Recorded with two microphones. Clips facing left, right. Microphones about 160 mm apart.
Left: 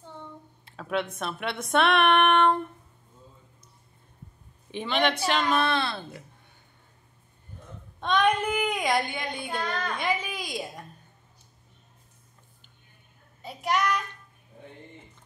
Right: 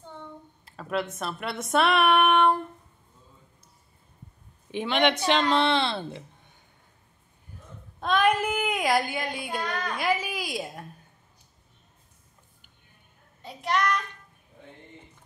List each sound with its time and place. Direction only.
0.7 s a sound: centre (ahead or behind)
4.7 s a woman's voice: 15° right (ahead or behind)
5.3 s a woman's voice: 25° right (ahead or behind)
8.0 s child singing: 5° right (ahead or behind)
13.4 s child singing: 5° left (ahead or behind)